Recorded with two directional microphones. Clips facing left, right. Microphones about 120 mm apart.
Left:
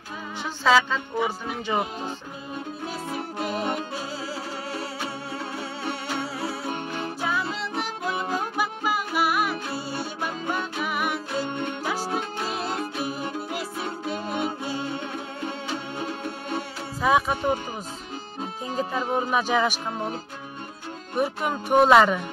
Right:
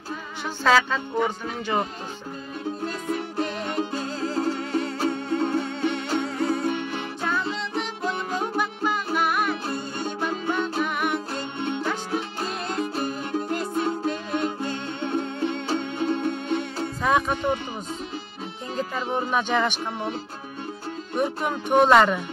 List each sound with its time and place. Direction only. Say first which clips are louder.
0.7 s speech: even; 5° left (ahead or behind)
3.1 s music: right 2 dB; 5° left (ahead or behind)
6.7 s music: right 2 dB; 40° left (ahead or behind)
7.2 s music: right 1 dB; 5° left (ahead or behind)
8.5 s music: right 1 dB; 5° left (ahead or behind)
12.4 s music: right 1 dB; 5° left (ahead or behind)
19.1 s speech: even; 5° left (ahead or behind)
21.2 s speech: even; 5° left (ahead or behind)